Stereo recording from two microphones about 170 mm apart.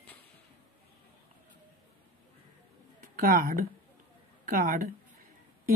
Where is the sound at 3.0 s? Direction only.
55° right (ahead or behind).